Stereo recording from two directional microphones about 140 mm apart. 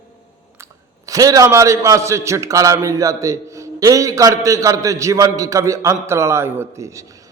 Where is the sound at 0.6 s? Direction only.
25° right (ahead or behind).